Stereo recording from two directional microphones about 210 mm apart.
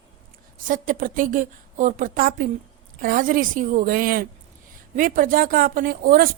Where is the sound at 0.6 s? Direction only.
40° right (ahead or behind).